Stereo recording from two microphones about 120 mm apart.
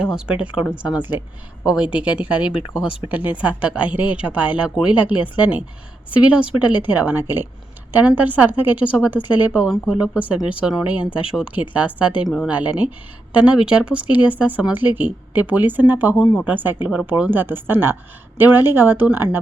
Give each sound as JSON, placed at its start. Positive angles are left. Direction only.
{"t": 0.0, "sound": "speech", "side_deg": -10}